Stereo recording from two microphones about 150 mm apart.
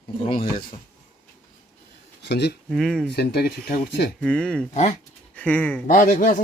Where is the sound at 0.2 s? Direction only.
40° left (ahead or behind).